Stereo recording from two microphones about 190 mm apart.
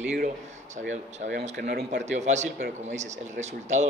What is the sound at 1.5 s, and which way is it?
Speech, 60° right (ahead or behind).